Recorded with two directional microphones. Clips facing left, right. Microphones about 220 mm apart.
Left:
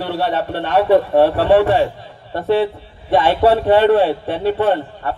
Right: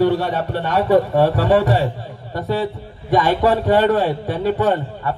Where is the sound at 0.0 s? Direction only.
45° right (ahead or behind).